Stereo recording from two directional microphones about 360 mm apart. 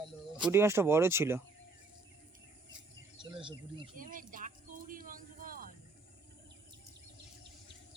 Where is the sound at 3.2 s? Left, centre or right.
Centre.